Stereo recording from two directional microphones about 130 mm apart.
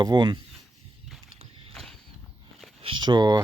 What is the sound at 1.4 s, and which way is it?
Clip-clop, 45° right (ahead or behind).